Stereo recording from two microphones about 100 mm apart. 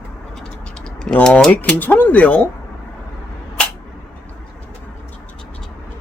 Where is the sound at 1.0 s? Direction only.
10° left (ahead or behind).